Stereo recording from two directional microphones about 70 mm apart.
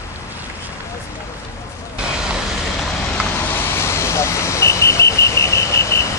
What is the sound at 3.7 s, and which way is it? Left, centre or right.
Vehicle, left.